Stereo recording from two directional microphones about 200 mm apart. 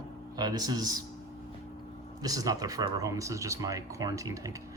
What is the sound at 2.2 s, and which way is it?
Speech, 20° right (ahead or behind).